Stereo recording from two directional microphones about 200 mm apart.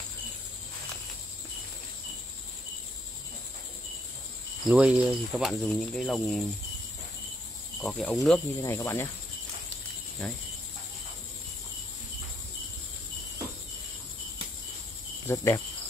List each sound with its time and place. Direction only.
4.6 s speech: 5° right (ahead or behind)
7.8 s speech: centre (ahead or behind)
8.6 s speech: 10° left (ahead or behind)
10.2 s speech: 5° left (ahead or behind)
15.2 s speech: 15° left (ahead or behind)